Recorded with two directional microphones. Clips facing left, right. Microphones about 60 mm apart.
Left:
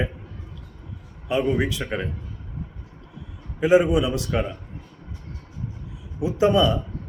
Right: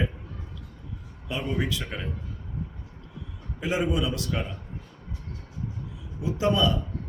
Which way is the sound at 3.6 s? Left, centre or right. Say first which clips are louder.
Left 9 dB; left.